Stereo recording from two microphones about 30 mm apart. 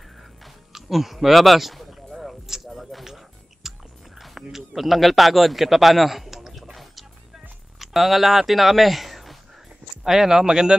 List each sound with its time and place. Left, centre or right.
0.2 s a sound: centre
4.2 s a man's voice: centre
10.0 s speech: centre